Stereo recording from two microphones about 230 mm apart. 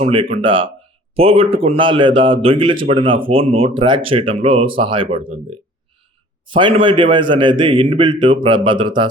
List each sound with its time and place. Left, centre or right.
0.0 s speech: right
6.5 s speech: right